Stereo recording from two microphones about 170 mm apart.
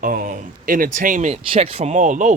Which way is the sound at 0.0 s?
50° right (ahead or behind).